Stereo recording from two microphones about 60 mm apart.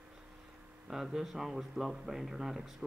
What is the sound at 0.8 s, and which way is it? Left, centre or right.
Speech, centre.